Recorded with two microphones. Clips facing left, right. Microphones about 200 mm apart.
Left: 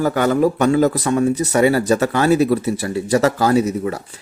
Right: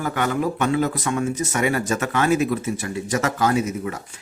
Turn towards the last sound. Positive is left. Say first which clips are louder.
# left 6 dB
turn(degrees=35)  # may be behind; listen again after turning